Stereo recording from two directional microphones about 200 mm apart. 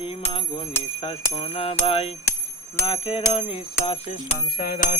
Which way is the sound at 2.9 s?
30° left (ahead or behind).